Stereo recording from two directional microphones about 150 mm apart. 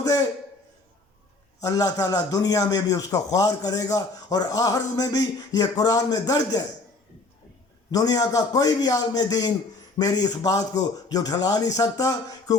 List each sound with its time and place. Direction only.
1.6 s a man's voice: 20° left (ahead or behind)
7.9 s a man's voice: 25° left (ahead or behind)